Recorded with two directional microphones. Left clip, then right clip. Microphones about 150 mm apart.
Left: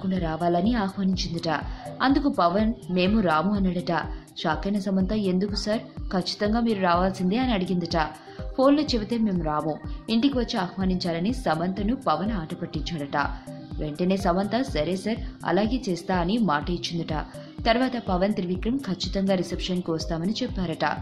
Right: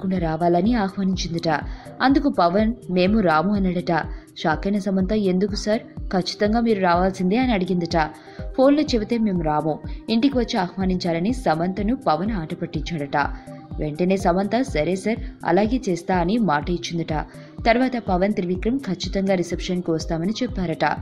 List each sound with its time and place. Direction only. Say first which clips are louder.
0.1 s speech: right 5 dB; 25° right (ahead or behind)